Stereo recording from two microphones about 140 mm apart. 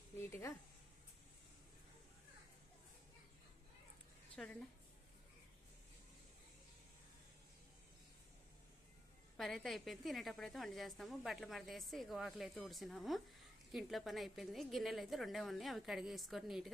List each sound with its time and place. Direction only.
0.3 s speech: 20° left (ahead or behind)
4.4 s a woman's voice: 5° left (ahead or behind)
9.4 s a woman's voice: centre (ahead or behind)